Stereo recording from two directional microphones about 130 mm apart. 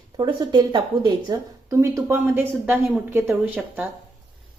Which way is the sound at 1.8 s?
15° right (ahead or behind).